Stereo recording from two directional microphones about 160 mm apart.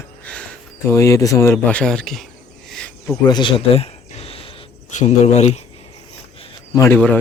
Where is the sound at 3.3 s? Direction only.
30° left (ahead or behind).